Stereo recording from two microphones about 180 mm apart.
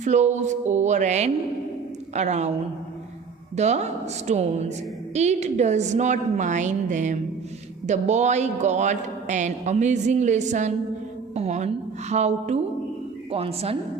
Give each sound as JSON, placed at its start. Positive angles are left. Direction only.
{"t": 0.0, "sound": "speech", "side_deg": -40}
{"t": 3.5, "sound": "speech", "side_deg": -40}